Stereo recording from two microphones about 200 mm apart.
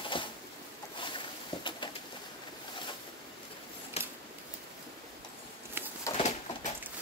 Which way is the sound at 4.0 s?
30° left (ahead or behind).